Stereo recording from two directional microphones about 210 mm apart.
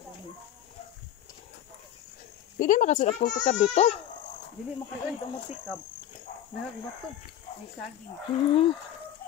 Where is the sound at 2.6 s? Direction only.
40° left (ahead or behind).